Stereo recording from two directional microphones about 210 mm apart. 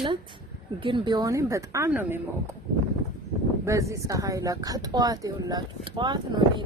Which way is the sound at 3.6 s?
15° right (ahead or behind).